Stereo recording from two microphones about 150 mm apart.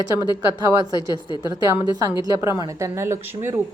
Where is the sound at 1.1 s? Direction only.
30° left (ahead or behind).